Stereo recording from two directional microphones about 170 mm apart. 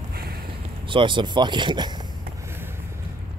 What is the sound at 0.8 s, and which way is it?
Speech, 30° right (ahead or behind).